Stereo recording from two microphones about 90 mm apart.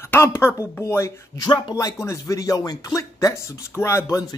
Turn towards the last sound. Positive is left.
turn(degrees=35)  # may be behind; listen again after turning